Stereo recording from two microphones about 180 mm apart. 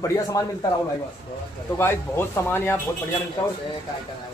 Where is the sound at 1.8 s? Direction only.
15° left (ahead or behind).